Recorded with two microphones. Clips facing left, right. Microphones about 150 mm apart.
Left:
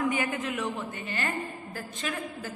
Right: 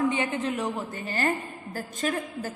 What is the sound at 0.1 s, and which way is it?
A woman's voice, 25° right (ahead or behind).